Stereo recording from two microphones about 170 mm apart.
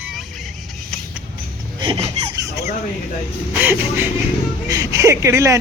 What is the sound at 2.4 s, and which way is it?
Fowl, 20° right (ahead or behind).